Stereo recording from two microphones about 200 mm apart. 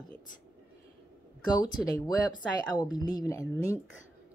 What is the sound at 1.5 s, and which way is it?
A woman's voice, 20° left (ahead or behind).